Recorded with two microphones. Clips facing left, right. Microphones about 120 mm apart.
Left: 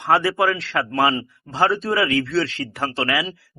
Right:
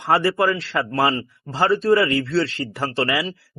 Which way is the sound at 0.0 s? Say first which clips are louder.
Even; centre (ahead or behind).